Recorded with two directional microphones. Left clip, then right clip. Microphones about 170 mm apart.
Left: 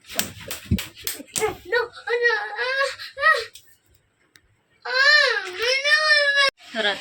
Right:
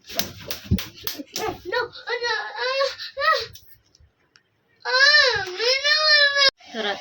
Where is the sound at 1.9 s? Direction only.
5° left (ahead or behind).